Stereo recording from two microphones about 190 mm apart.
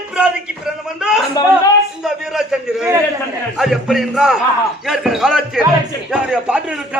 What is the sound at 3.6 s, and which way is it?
A man's voice, centre (ahead or behind).